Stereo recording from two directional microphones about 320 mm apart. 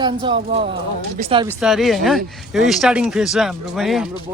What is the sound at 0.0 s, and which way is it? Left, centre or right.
Speech, centre.